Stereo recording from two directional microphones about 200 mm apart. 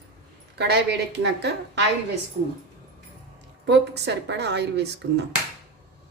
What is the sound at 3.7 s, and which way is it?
A woman's voice, 60° right (ahead or behind).